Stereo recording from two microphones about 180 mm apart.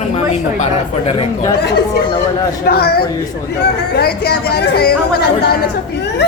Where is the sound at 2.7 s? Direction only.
60° left (ahead or behind).